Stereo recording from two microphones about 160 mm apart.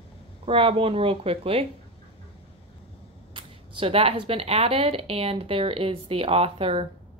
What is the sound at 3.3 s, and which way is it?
Speech, 30° right (ahead or behind).